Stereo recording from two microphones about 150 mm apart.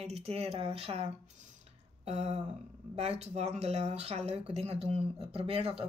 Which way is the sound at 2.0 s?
45° right (ahead or behind).